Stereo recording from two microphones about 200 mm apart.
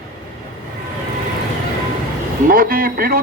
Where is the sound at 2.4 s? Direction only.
45° right (ahead or behind).